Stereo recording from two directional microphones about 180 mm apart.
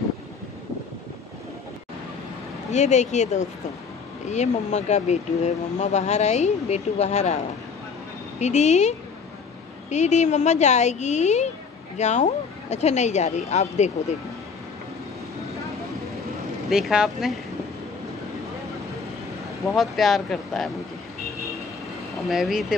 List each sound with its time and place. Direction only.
2.7 s speech: 40° left (ahead or behind)
16.6 s speech: centre (ahead or behind)
19.6 s speech: centre (ahead or behind)
22.3 s speech: centre (ahead or behind)